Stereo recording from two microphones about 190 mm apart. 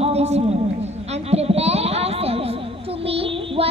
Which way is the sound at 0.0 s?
35° right (ahead or behind).